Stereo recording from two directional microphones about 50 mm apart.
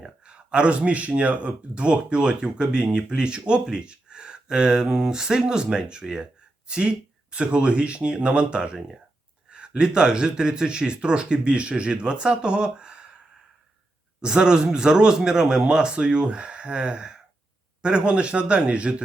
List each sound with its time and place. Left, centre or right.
0.2 s speech: right
14.2 s speech: centre